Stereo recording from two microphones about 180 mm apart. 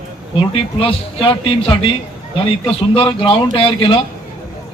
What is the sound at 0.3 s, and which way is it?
A man's voice, 30° left (ahead or behind).